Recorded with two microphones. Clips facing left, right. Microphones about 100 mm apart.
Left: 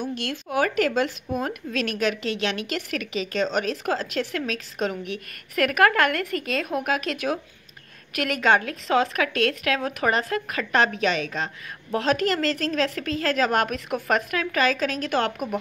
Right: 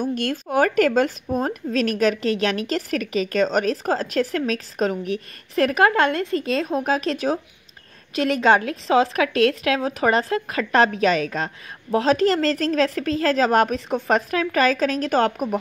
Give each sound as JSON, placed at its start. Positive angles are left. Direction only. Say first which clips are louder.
{"t": 0.0, "sound": "speech", "louder": "right 5 dB", "side_deg": -45}